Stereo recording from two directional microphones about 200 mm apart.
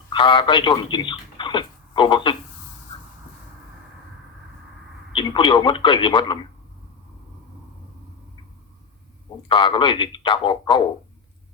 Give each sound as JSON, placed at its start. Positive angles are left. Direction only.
{"t": 0.1, "sound": "speech", "side_deg": 25}
{"t": 5.1, "sound": "speech", "side_deg": 25}
{"t": 9.5, "sound": "speech", "side_deg": 25}